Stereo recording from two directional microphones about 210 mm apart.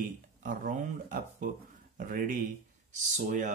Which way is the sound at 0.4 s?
40° right (ahead or behind).